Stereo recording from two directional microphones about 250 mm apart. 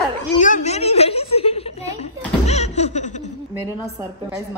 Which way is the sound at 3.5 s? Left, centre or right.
Centre.